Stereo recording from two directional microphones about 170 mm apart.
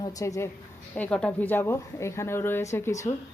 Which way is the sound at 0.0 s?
20° left (ahead or behind).